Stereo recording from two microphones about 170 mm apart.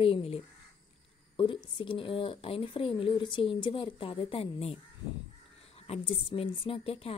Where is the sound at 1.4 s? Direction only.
30° left (ahead or behind).